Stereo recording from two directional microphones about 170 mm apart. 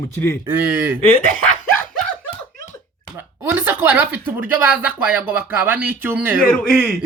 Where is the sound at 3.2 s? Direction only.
15° right (ahead or behind).